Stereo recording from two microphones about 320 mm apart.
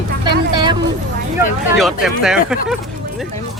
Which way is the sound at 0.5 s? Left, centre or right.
Centre.